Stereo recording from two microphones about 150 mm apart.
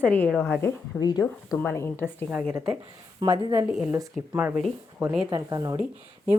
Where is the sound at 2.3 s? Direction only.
Centre (ahead or behind).